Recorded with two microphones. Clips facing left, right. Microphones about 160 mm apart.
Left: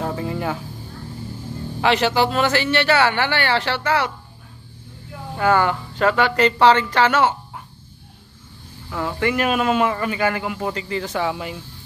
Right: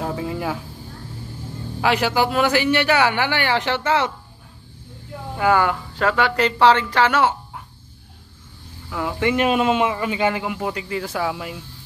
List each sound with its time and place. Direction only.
0.0 s speech: 5° right (ahead or behind)
1.8 s a man's voice: 10° right (ahead or behind)
5.4 s a man's voice: 10° right (ahead or behind)
9.2 s a man's voice: 25° right (ahead or behind); by 11.5 s centre (ahead or behind)